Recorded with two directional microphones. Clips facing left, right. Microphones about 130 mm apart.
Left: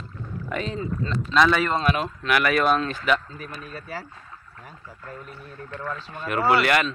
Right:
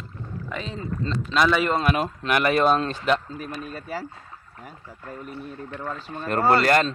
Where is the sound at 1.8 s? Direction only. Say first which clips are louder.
Even; 40° right (ahead or behind).